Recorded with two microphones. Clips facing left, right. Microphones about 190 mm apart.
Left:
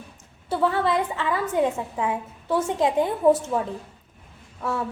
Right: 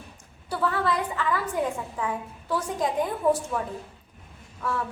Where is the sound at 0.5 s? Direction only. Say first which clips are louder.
Left 4 dB; 25° left (ahead or behind).